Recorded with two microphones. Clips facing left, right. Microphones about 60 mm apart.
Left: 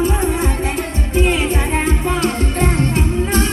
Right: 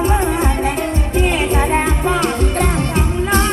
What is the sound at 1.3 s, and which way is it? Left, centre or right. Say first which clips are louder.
Music: right 2 dB; right.